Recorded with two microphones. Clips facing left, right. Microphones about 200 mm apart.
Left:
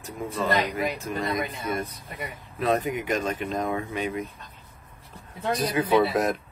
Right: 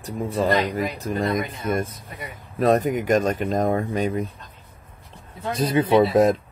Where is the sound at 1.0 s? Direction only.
50° right (ahead or behind).